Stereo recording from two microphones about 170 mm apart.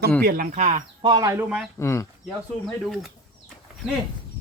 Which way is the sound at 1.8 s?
15° left (ahead or behind).